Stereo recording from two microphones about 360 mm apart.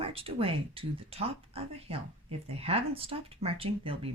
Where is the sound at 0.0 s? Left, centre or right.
Centre.